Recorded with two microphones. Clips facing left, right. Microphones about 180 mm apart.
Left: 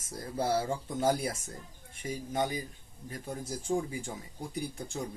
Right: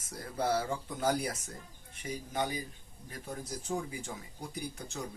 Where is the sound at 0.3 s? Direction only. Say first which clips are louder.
Left 1 dB; 25° left (ahead or behind).